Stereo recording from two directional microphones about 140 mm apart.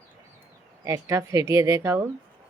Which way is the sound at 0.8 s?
20° right (ahead or behind).